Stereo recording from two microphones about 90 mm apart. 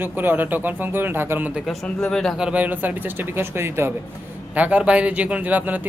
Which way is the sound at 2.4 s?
15° right (ahead or behind).